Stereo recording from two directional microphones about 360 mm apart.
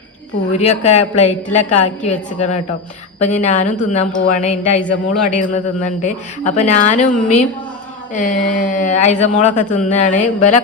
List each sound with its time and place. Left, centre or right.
0.5 s a woman's voice: centre